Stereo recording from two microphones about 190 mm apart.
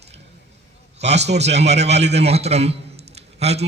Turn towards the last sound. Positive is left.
turn(degrees=-35)  # may be behind; listen again after turning